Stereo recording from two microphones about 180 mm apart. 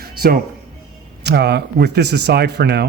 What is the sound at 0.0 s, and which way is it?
Music, 55° right (ahead or behind).